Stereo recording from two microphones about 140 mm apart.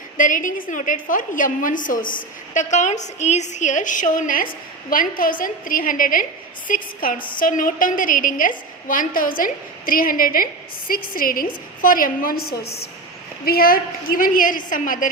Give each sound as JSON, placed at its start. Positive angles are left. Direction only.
{"t": 0.2, "sound": "a woman's voice", "side_deg": 70}
{"t": 4.9, "sound": "a woman's voice", "side_deg": 90}